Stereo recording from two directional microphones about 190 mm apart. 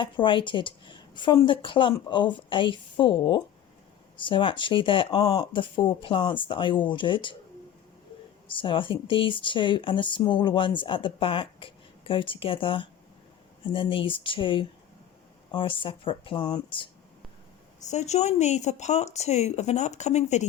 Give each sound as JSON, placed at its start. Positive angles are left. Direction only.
{"t": 0.0, "sound": "speech", "side_deg": 25}
{"t": 8.4, "sound": "speech", "side_deg": 25}
{"t": 17.7, "sound": "a woman's voice", "side_deg": 35}